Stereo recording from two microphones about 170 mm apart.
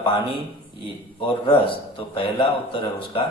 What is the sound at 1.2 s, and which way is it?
Speech, 30° left (ahead or behind).